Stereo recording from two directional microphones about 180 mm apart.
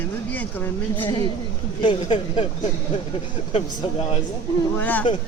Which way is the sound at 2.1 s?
25° left (ahead or behind).